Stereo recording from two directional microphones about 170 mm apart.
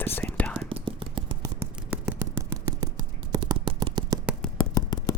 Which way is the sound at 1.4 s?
10° right (ahead or behind).